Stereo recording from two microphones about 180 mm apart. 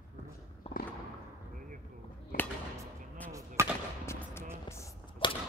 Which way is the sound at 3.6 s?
15° right (ahead or behind).